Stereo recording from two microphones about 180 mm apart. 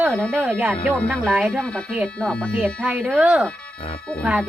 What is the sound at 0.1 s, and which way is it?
Speech, 5° left (ahead or behind).